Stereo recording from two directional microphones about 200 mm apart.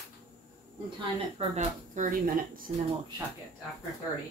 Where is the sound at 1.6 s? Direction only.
40° right (ahead or behind).